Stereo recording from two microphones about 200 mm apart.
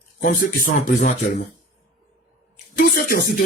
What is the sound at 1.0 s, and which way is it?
Speech, 40° left (ahead or behind).